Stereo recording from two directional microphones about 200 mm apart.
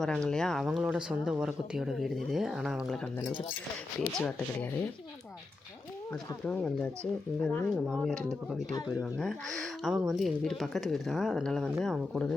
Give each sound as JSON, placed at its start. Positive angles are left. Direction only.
{"t": 0.0, "sound": "speech", "side_deg": 5}
{"t": 4.2, "sound": "speech", "side_deg": 5}
{"t": 6.4, "sound": "speech", "side_deg": 5}